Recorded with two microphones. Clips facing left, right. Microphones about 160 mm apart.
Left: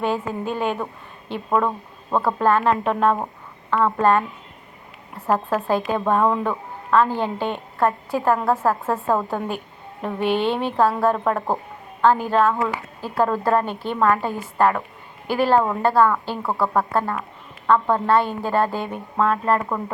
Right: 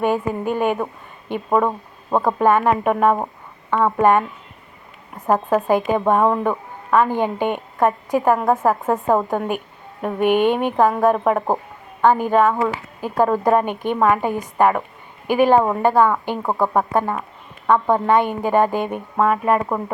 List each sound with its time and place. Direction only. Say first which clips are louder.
0.0 s a woman's voice: right 4 dB; 15° right (ahead or behind)